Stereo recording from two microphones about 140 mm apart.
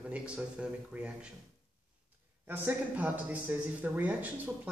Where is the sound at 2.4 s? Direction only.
10° right (ahead or behind).